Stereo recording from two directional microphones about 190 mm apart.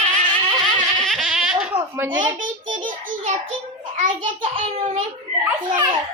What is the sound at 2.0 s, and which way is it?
Speech, 10° right (ahead or behind).